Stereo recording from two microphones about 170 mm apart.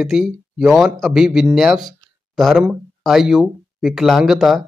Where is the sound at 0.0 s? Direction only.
Centre (ahead or behind).